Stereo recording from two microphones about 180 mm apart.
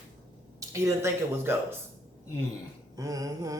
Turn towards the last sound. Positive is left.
turn(degrees=-20)  # may be behind; listen again after turning